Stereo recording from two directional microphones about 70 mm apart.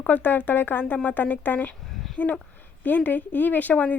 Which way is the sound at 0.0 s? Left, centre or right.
Left.